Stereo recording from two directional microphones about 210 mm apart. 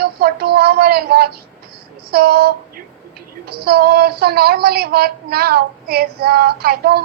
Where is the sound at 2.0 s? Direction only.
50° right (ahead or behind).